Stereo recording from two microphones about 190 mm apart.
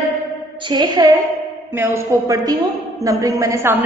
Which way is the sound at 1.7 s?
10° right (ahead or behind).